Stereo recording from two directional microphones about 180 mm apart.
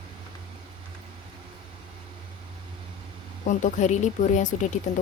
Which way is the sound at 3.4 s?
45° left (ahead or behind).